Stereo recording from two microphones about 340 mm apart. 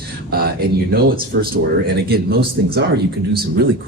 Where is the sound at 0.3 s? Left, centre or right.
Right.